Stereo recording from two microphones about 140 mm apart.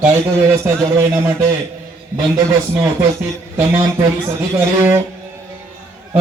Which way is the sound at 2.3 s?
20° right (ahead or behind).